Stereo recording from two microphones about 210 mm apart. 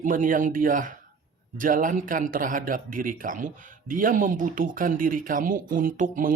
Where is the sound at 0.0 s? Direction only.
40° right (ahead or behind).